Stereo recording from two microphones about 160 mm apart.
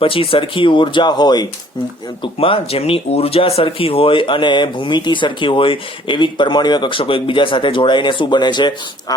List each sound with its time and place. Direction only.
0.0 s speech: 35° left (ahead or behind)